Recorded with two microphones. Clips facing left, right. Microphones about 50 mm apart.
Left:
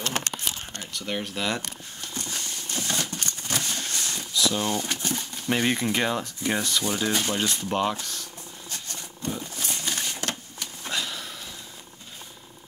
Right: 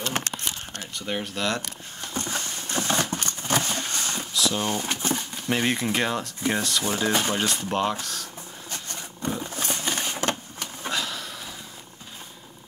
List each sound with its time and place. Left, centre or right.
0.9 s speech: centre
1.3 s speech: centre
2.1 s a sound: right
4.3 s a sound: centre
4.6 s speech: centre
5.5 s speech: centre
6.9 s speech: centre
7.3 s speech: centre
9.4 s a sound: right
10.9 s sniff: centre